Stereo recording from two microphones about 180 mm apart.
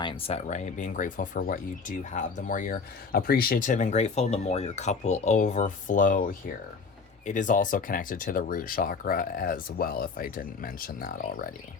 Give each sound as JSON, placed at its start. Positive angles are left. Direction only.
{"t": 0.0, "sound": "speech", "side_deg": 30}